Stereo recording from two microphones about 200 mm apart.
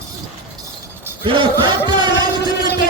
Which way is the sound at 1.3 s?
25° right (ahead or behind).